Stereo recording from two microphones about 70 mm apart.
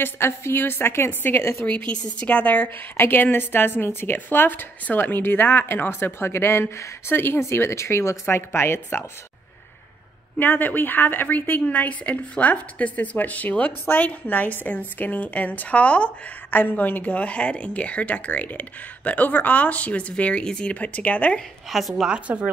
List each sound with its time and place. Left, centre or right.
0.0 s a woman's voice: left
1.6 s a woman's voice: centre; by 9.0 s left
10.3 s a woman's voice: left
21.6 s a woman's voice: centre
22.1 s speech: centre